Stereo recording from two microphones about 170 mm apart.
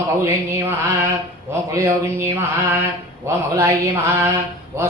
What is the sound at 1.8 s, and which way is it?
Speech, 15° right (ahead or behind).